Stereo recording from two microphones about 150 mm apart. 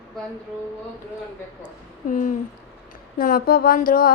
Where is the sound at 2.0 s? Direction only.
60° left (ahead or behind).